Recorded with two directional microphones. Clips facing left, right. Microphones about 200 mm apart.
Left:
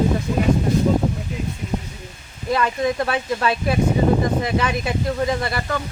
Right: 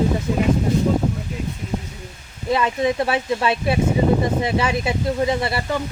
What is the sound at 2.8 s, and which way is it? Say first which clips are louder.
Speech: right 1 dB; 25° right (ahead or behind).